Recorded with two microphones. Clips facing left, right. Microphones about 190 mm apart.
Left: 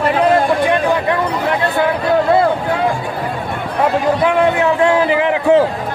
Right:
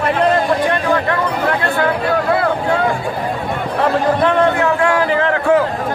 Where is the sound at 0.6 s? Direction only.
15° left (ahead or behind).